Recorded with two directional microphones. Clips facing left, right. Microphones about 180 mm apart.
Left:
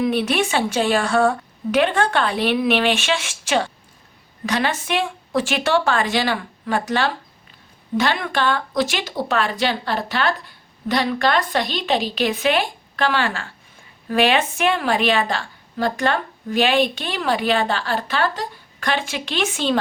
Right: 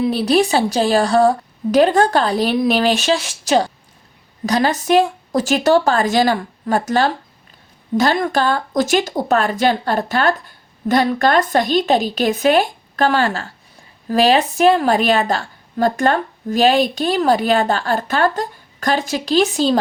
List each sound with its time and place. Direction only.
0.0 s a woman's voice: 35° right (ahead or behind)